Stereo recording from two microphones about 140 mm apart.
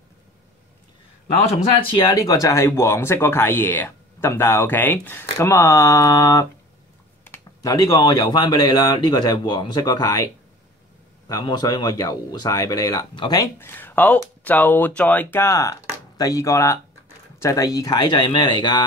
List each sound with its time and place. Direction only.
1.5 s speech: 40° left (ahead or behind)
13.6 s speech: 15° left (ahead or behind); by 18.8 s 30° left (ahead or behind)